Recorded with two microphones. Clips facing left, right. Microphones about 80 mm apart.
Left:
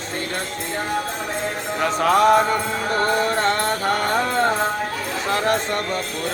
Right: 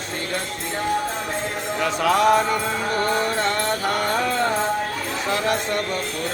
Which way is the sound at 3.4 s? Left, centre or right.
Left.